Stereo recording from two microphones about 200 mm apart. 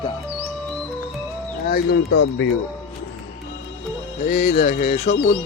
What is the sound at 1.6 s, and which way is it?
Speech, 50° left (ahead or behind).